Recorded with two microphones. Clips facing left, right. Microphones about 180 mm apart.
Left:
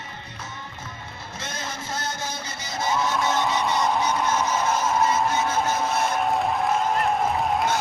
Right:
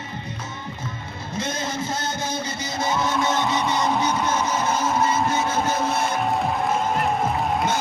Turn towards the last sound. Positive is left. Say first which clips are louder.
# even
turn(degrees=0)  # may be behind; listen again after turning